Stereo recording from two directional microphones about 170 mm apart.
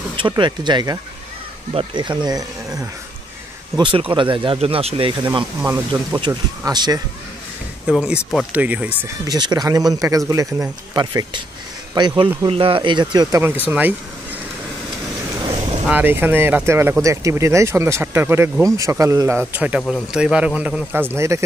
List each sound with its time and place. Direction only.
0.2 s speech: 25° right (ahead or behind)
7.8 s speech: 5° right (ahead or behind)
9.3 s speech: 25° right (ahead or behind)
15.9 s speech: 10° right (ahead or behind)